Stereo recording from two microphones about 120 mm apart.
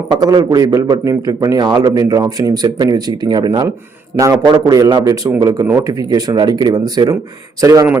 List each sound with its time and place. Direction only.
0.1 s a man's voice: 35° right (ahead or behind)